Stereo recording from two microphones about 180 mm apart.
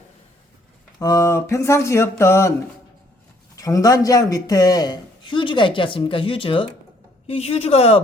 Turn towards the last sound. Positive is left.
turn(degrees=35)  # may be behind; listen again after turning